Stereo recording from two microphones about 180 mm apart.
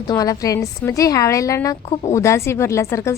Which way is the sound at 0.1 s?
20° left (ahead or behind).